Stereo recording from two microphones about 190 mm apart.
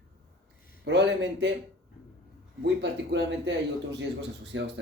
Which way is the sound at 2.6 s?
65° right (ahead or behind).